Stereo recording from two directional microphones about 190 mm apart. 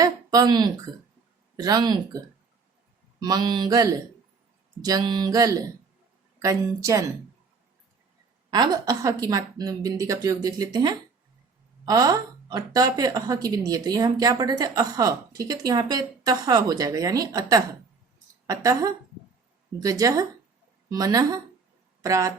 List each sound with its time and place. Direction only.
0.0 s a sound: 20° right (ahead or behind)
1.5 s a woman's voice: 20° right (ahead or behind)
8.4 s a woman's voice: 20° right (ahead or behind)